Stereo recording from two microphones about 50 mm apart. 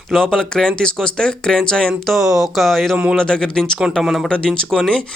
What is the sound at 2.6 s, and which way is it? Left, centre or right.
Speech, centre.